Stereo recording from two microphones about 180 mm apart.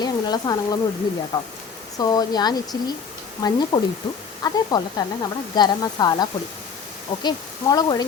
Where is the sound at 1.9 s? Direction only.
20° left (ahead or behind).